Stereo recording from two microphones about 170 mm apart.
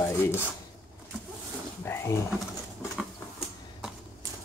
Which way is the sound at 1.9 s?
15° left (ahead or behind).